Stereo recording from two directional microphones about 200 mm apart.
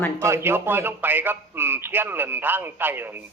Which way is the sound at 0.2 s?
15° right (ahead or behind).